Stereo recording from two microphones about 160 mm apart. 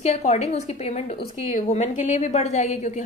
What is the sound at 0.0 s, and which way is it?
Speech, 45° left (ahead or behind).